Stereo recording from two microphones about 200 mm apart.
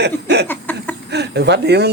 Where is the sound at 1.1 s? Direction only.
55° right (ahead or behind).